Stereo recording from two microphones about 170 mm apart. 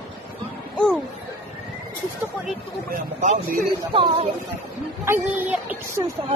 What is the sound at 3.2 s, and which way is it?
Speech, 50° right (ahead or behind).